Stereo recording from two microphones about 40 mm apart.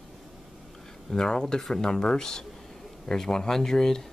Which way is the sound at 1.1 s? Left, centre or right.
Left.